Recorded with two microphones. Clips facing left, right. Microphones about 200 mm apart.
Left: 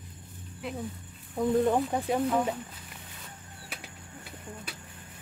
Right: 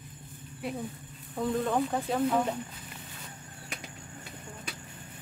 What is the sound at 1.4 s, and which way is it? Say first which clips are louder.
Speech: left 4 dB; 20° left (ahead or behind).